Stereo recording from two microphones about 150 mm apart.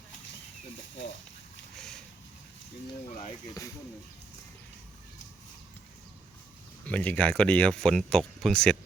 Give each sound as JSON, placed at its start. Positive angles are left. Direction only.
{"t": 1.7, "sound": "boat", "side_deg": 5}
{"t": 3.1, "sound": "speech", "side_deg": 55}
{"t": 6.8, "sound": "speech", "side_deg": 10}